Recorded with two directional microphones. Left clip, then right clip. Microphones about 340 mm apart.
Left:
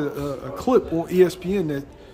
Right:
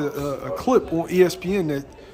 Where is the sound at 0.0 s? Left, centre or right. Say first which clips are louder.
Right 1 dB; centre.